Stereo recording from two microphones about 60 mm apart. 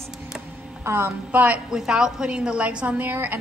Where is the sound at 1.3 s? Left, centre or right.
Right.